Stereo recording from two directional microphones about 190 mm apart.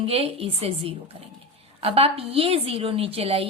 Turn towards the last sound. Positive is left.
turn(degrees=-30)  # may be behind; listen again after turning